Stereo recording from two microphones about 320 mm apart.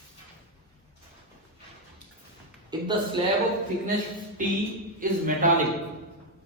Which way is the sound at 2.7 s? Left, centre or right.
Centre.